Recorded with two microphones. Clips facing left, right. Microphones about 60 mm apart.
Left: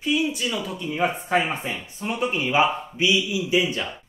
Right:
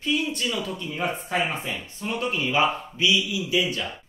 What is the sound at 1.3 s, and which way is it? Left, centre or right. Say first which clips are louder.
Speech: left 3 dB; left.